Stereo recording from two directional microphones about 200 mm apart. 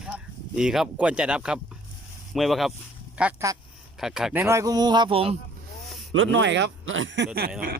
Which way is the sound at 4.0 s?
Centre (ahead or behind).